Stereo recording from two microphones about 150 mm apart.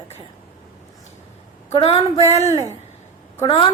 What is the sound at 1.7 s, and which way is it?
Speech, 40° left (ahead or behind).